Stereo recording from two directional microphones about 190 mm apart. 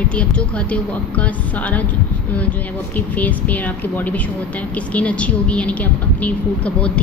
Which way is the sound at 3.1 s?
10° left (ahead or behind).